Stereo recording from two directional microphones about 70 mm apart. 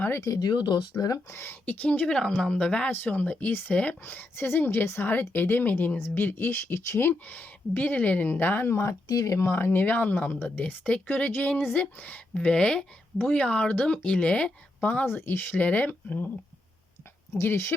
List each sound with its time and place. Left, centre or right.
0.3 s speech: left
1.3 s speech: left
1.6 s speech: left
7.1 s speech: left
9.0 s speech: left
9.5 s speech: left
12.3 s speech: centre
15.0 s speech: left
17.3 s speech: left